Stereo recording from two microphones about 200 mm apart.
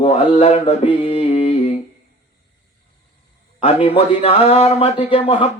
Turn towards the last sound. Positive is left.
turn(degrees=30)  # may be behind; listen again after turning